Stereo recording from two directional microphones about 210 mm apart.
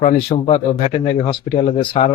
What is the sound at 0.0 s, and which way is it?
Speech, 30° left (ahead or behind).